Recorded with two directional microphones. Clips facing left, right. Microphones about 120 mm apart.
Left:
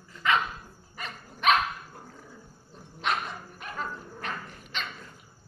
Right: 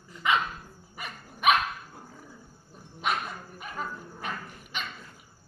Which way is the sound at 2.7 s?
5° right (ahead or behind).